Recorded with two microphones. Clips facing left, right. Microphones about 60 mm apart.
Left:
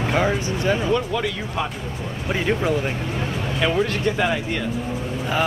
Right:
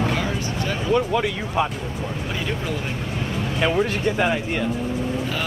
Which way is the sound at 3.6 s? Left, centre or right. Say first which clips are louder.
Even; centre.